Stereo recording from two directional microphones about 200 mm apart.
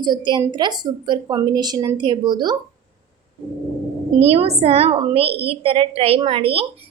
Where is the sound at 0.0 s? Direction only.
20° right (ahead or behind).